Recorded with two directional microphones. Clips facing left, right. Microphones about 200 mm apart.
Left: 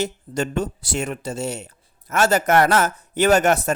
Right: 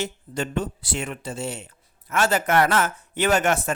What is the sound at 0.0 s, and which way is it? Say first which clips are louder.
Speech: left 4 dB; 40° left (ahead or behind).